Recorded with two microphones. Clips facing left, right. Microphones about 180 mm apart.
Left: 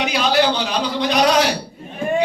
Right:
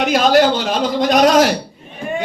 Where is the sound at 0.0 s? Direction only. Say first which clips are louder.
Right 5 dB; 45° right (ahead or behind).